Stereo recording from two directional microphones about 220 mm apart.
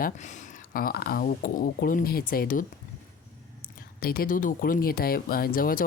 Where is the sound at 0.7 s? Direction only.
40° left (ahead or behind).